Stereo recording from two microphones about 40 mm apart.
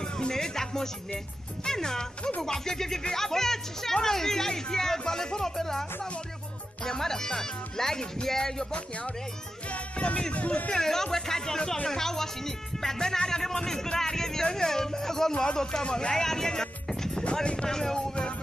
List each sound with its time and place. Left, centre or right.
0.0 s music: centre
1.6 s speech: centre
8.7 s speech: left
9.7 s music: left
10.3 s speech: left
10.7 s speech: centre
17.2 s speech: left
17.6 s speech: centre